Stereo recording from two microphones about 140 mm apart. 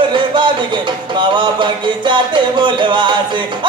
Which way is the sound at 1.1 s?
35° right (ahead or behind).